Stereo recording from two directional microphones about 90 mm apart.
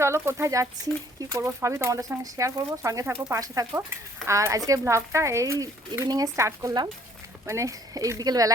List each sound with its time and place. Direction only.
0.0 s speech: 30° right (ahead or behind)